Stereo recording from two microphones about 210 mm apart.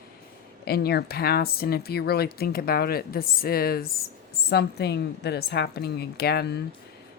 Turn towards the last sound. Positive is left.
turn(degrees=50)  # may be behind; listen again after turning